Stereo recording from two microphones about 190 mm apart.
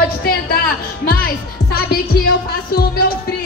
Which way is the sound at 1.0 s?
50° left (ahead or behind).